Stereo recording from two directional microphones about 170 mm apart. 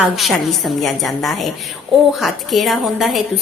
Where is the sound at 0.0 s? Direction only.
Centre (ahead or behind).